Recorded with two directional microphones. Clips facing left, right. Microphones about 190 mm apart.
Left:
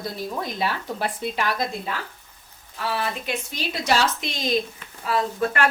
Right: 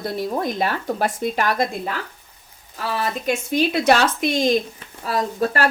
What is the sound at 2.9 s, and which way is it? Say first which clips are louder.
Speech: right 6 dB; 45° right (ahead or behind).